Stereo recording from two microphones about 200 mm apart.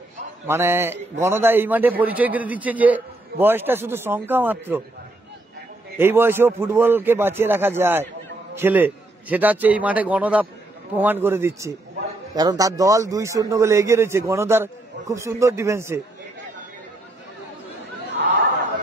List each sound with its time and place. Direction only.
0.5 s a man's voice: 10° right (ahead or behind)
5.9 s a man's voice: 10° right (ahead or behind)